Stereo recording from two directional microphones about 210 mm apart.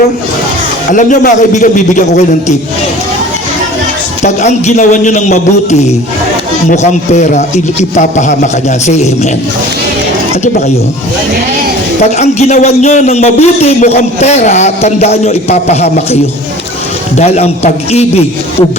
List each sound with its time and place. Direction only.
0.9 s a man's voice: 40° left (ahead or behind)
4.2 s a man's voice: 30° left (ahead or behind)
12.2 s a man's voice: 35° left (ahead or behind)
17.2 s a man's voice: 30° left (ahead or behind)